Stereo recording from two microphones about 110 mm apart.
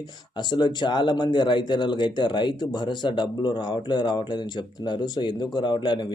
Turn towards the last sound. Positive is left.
turn(degrees=45)  # may be behind; listen again after turning